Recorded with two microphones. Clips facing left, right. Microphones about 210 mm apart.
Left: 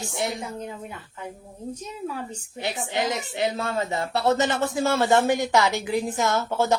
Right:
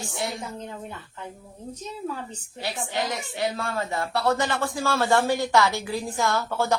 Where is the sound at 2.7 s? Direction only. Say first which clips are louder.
Left 2 dB; 20° left (ahead or behind).